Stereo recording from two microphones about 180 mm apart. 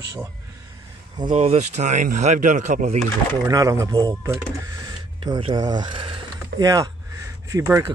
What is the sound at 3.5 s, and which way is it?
Speech, 20° right (ahead or behind).